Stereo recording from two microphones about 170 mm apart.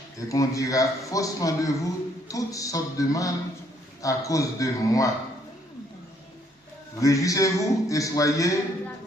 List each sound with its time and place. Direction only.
0.3 s speech: 20° left (ahead or behind)
7.0 s speech: 20° left (ahead or behind)